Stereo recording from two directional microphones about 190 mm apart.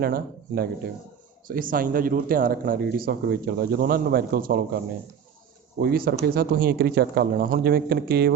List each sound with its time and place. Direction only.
0.0 s speech: 55° right (ahead or behind)
5.8 s a man's voice: 50° right (ahead or behind)